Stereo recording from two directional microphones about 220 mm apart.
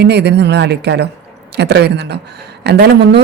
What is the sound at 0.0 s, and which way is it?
Speech, 50° right (ahead or behind).